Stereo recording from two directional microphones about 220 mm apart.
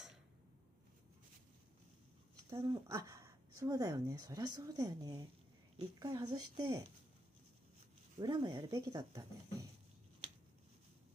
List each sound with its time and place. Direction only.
2.5 s speech: 15° right (ahead or behind)
8.2 s speech: 20° right (ahead or behind)